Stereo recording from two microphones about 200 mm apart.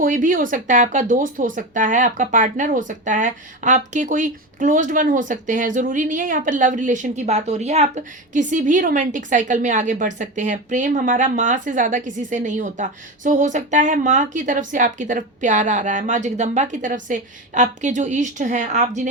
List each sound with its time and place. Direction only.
0.0 s speech: 40° right (ahead or behind)